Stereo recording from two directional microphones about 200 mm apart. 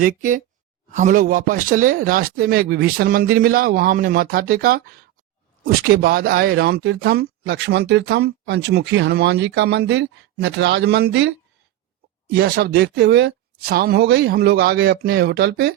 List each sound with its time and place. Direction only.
0.0 s speech: 40° right (ahead or behind); by 15.7 s 55° right (ahead or behind)